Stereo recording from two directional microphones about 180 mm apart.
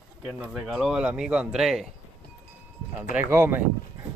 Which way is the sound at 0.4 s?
5° right (ahead or behind).